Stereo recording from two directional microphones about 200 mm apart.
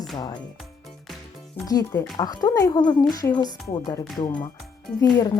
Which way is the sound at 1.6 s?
20° left (ahead or behind).